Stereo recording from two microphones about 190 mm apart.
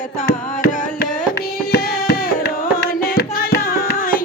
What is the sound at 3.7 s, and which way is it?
Music, 50° left (ahead or behind).